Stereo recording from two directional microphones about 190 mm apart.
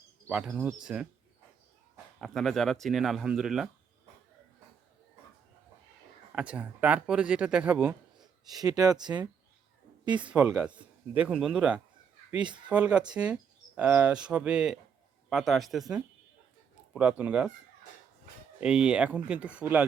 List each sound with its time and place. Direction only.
0.3 s speech: 5° right (ahead or behind)
2.2 s speech: centre (ahead or behind)
6.3 s speech: 5° right (ahead or behind)
8.4 s speech: 20° right (ahead or behind)
10.3 s speech: 5° right (ahead or behind)
16.9 s speech: 5° right (ahead or behind)
18.6 s speech: 5° right (ahead or behind)